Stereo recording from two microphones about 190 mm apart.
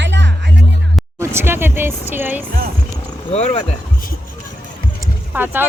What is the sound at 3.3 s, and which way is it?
Speech, 30° left (ahead or behind).